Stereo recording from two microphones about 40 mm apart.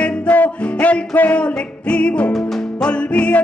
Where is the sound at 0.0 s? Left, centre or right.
Left.